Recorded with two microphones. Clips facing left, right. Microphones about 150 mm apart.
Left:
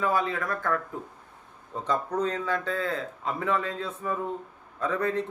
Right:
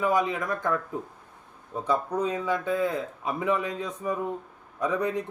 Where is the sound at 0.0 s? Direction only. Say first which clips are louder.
Right 2 dB; 15° right (ahead or behind).